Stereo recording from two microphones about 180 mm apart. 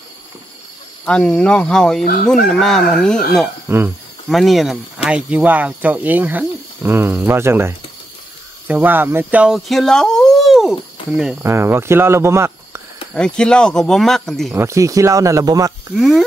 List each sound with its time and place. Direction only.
1.0 s speech: 5° left (ahead or behind)
3.6 s speech: 10° right (ahead or behind)
4.3 s speech: centre (ahead or behind)
11.4 s speech: 15° right (ahead or behind)
13.1 s speech: 5° left (ahead or behind)
14.5 s speech: 15° right (ahead or behind)
16.0 s speech: centre (ahead or behind)